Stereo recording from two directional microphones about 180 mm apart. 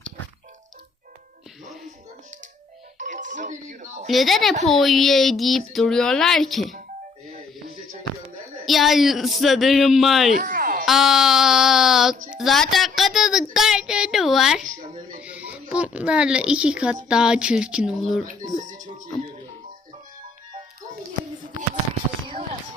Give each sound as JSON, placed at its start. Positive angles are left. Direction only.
{"t": 3.0, "sound": "music", "side_deg": -45}
{"t": 4.1, "sound": "speech", "side_deg": 0}
{"t": 8.6, "sound": "speech", "side_deg": 0}
{"t": 10.3, "sound": "a sound", "side_deg": -50}
{"t": 10.8, "sound": "speech", "side_deg": 0}
{"t": 18.3, "sound": "music", "side_deg": -45}